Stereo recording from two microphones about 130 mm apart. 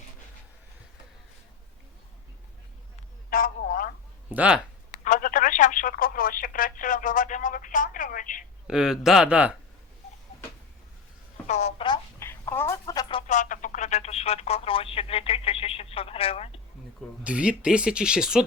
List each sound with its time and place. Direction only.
3.2 s a sound: 90° left
4.3 s speech: 10° right (ahead or behind)
4.9 s speech: 80° left
8.6 s speech: 5° right (ahead or behind)
11.4 s telephone: 60° left (ahead or behind)
12.2 s a sound: 20° left (ahead or behind)
12.8 s a sound: 35° left (ahead or behind)
13.2 s speech: 70° left (ahead or behind); by 16.6 s 50° left (ahead or behind)
17.2 s speech: 10° right (ahead or behind)